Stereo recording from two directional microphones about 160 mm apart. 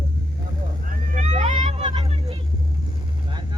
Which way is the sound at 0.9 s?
50° right (ahead or behind).